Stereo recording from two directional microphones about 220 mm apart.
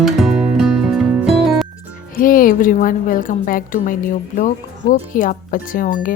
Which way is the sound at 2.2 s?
40° left (ahead or behind).